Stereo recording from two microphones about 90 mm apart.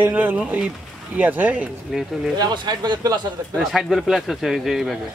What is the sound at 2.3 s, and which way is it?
Speech, 50° right (ahead or behind).